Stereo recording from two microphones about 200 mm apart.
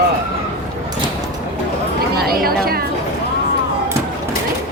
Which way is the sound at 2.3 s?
50° right (ahead or behind).